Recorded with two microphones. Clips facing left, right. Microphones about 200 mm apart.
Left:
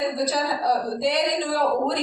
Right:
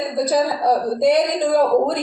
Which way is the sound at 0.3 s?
50° right (ahead or behind).